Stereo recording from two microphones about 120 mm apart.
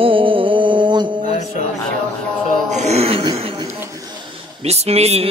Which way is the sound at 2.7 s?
65° right (ahead or behind).